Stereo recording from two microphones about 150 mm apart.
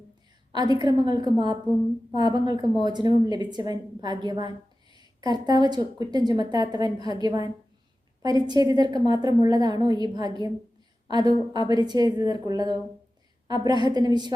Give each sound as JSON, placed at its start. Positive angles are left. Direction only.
{"t": 0.5, "sound": "a woman's voice", "side_deg": -30}